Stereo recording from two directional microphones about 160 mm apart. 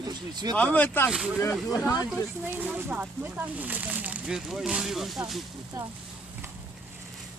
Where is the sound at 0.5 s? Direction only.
10° left (ahead or behind).